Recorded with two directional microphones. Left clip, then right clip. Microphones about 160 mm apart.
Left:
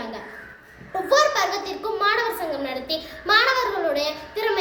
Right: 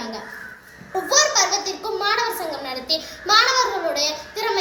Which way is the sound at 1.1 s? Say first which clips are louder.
Right 1 dB; 20° left (ahead or behind).